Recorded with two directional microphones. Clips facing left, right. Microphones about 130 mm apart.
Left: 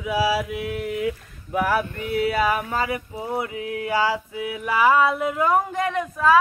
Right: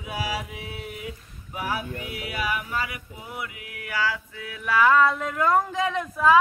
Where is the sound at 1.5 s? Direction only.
55° left (ahead or behind).